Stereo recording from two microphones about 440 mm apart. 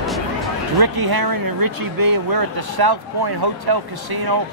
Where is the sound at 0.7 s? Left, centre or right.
Right.